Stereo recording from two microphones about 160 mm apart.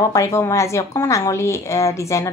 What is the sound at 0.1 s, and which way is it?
Speech, 20° left (ahead or behind).